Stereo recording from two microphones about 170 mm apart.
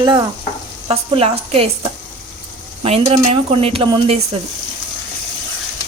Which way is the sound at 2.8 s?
40° right (ahead or behind).